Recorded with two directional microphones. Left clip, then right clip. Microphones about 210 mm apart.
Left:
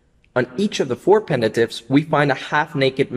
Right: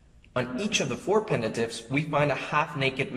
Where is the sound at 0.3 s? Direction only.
45° left (ahead or behind).